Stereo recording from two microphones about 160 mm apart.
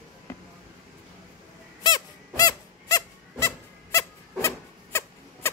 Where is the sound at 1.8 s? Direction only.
25° left (ahead or behind).